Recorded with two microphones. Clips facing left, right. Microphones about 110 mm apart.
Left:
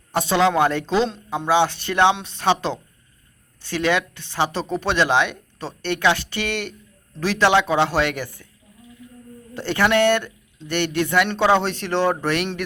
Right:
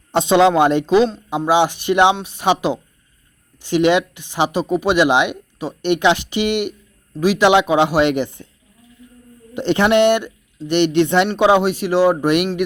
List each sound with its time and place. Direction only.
0.1 s speech: 20° right (ahead or behind)
9.6 s speech: 20° right (ahead or behind)
11.3 s speech: 15° right (ahead or behind)